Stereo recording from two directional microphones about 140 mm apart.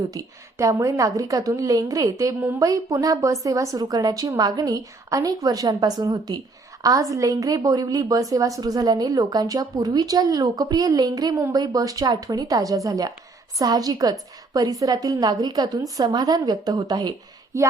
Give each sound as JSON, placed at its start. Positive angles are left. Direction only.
{"t": 0.1, "sound": "a woman's voice", "side_deg": -25}